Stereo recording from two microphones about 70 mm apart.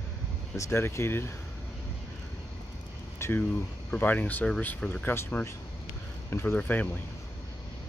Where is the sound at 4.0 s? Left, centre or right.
Left.